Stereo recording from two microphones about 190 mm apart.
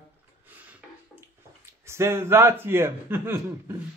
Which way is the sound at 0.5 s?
10° right (ahead or behind).